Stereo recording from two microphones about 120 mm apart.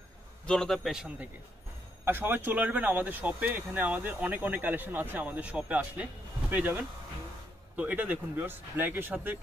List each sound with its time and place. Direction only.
0.5 s a man's voice: 5° left (ahead or behind)
2.0 s speech: 15° right (ahead or behind)